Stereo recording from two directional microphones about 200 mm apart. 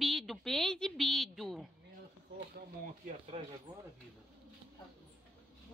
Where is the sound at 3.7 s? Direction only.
20° right (ahead or behind).